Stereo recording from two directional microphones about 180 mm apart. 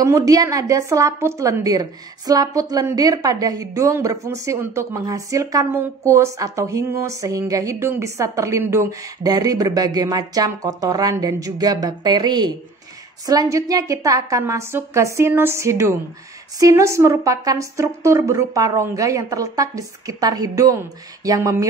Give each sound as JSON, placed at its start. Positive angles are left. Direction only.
{"t": 0.0, "sound": "a woman's voice", "side_deg": -20}